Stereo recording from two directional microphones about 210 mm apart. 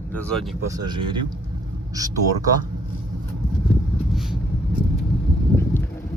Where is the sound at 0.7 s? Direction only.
20° right (ahead or behind).